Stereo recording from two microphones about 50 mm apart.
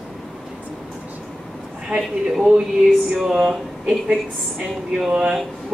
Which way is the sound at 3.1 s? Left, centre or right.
Centre.